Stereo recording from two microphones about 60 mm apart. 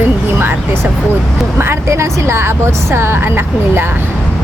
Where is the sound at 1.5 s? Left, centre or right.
Right.